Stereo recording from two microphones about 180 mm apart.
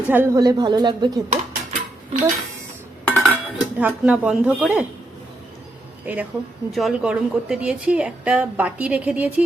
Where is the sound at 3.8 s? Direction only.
5° right (ahead or behind).